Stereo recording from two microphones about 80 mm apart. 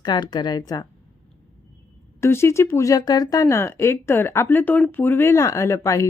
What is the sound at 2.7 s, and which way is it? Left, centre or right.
Speech, left.